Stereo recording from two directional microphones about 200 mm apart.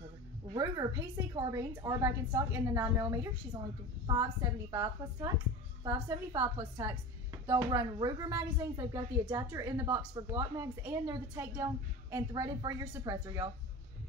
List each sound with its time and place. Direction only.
0.5 s a woman's voice: 20° right (ahead or behind)